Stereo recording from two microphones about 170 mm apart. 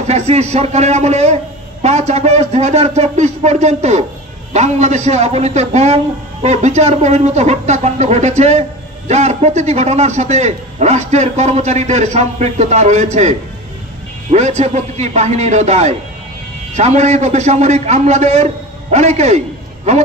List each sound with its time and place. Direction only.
0.0 s a man's voice: 40° right (ahead or behind)